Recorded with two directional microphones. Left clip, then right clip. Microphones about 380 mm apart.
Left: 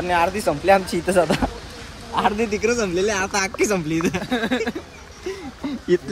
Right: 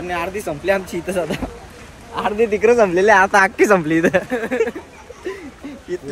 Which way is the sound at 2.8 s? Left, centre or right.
Right.